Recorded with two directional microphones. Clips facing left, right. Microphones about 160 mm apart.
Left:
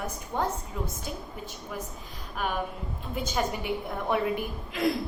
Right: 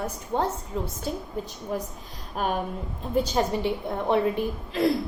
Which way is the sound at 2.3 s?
35° right (ahead or behind).